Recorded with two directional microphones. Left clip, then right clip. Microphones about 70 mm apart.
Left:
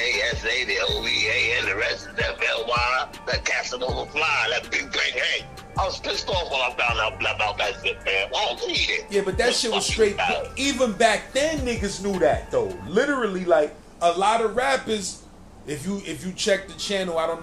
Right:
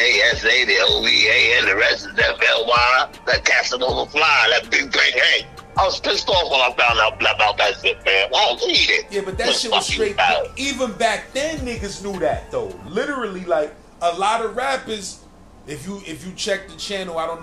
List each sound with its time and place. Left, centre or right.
0.0 s speech: right
9.1 s speech: left
9.7 s speech: right
10.6 s speech: left